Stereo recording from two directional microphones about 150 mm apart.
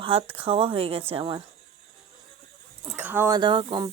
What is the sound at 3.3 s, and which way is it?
Speech, 30° right (ahead or behind).